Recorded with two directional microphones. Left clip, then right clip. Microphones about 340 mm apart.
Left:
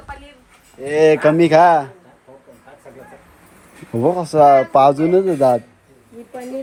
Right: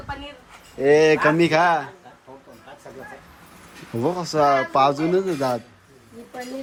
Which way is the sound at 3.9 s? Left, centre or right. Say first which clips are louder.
Left 7 dB; centre.